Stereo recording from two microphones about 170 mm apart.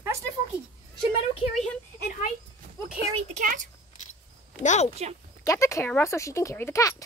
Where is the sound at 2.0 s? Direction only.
45° left (ahead or behind).